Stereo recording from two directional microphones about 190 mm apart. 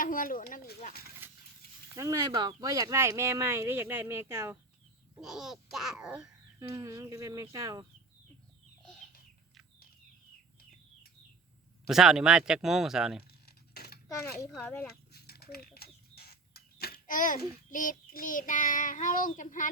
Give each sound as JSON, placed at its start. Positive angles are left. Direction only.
{"t": 0.0, "sound": "speech", "side_deg": 45}
{"t": 2.0, "sound": "speech", "side_deg": -20}
{"t": 5.2, "sound": "speech", "side_deg": 0}
{"t": 6.6, "sound": "speech", "side_deg": -15}
{"t": 11.9, "sound": "speech", "side_deg": 0}
{"t": 13.4, "sound": "a sound", "side_deg": 55}
{"t": 15.1, "sound": "a sound", "side_deg": 55}